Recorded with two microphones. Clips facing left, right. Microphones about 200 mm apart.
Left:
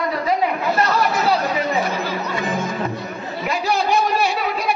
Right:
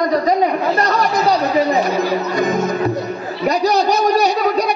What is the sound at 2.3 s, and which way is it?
Music, 40° right (ahead or behind).